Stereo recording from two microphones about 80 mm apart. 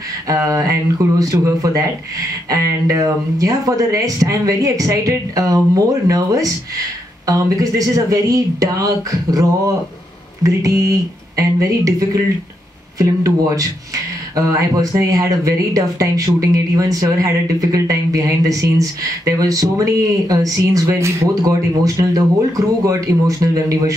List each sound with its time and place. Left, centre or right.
0.3 s speech: right